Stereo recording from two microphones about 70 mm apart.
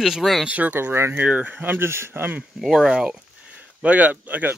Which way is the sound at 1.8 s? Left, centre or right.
Right.